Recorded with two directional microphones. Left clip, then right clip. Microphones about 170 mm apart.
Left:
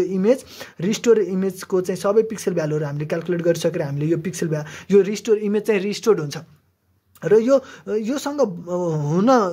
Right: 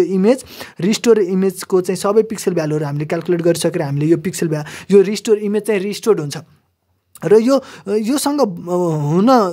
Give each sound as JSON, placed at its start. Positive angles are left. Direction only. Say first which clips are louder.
{"t": 0.0, "sound": "speech", "louder": "right 4 dB", "side_deg": -45}
{"t": 7.2, "sound": "speech", "louder": "right 3 dB", "side_deg": -50}